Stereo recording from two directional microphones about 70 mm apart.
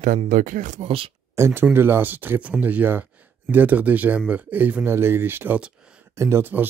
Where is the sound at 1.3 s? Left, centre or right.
Right.